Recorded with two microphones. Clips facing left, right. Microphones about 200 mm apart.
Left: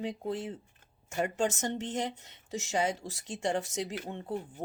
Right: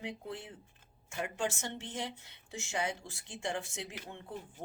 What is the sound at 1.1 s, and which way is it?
Speech, 40° left (ahead or behind).